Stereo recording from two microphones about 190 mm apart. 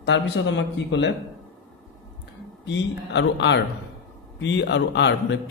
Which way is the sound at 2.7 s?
70° left (ahead or behind).